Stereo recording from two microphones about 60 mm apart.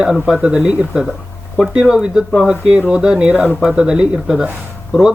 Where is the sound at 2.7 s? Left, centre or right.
Centre.